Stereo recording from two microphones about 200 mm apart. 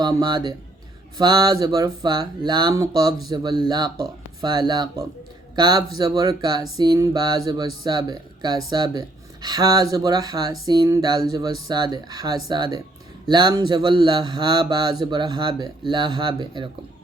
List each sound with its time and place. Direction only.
0.0 s speech: 20° right (ahead or behind)